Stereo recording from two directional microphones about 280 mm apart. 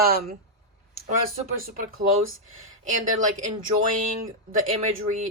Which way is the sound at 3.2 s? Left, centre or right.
Right.